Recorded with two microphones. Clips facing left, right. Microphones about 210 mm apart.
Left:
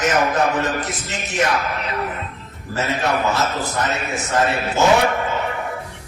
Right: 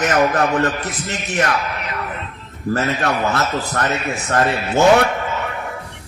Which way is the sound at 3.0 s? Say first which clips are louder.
Even; 60° right (ahead or behind).